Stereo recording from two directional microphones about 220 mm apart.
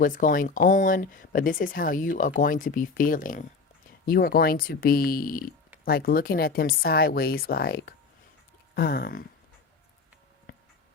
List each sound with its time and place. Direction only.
0.0 s speech: 40° left (ahead or behind)